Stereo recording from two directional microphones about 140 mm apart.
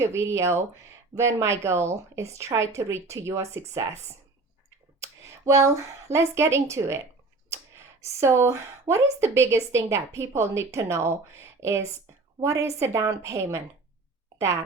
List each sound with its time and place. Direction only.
0.0 s speech: 20° right (ahead or behind)
5.2 s speech: 20° right (ahead or behind)